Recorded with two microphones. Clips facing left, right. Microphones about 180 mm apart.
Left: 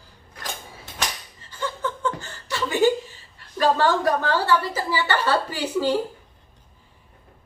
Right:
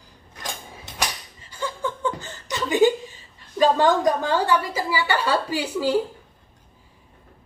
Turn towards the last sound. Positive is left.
turn(degrees=-10)  # may be behind; listen again after turning